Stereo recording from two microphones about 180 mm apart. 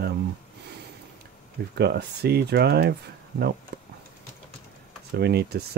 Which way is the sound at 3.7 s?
65° right (ahead or behind).